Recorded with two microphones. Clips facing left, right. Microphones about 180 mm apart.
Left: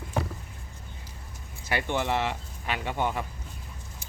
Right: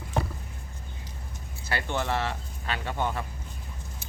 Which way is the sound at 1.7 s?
15° left (ahead or behind).